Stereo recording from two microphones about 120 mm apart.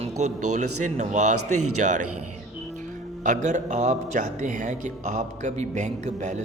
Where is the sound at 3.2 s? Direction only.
90° right.